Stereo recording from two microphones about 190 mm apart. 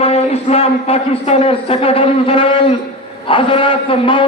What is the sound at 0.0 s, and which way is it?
A man's voice, 35° left (ahead or behind).